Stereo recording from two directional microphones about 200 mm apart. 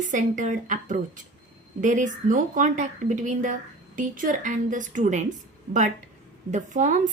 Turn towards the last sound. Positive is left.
turn(degrees=-40)  # may be behind; listen again after turning